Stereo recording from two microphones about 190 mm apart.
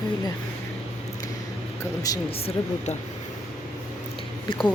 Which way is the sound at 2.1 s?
20° left (ahead or behind).